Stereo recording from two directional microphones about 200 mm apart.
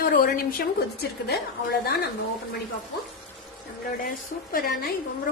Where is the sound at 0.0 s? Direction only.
45° left (ahead or behind).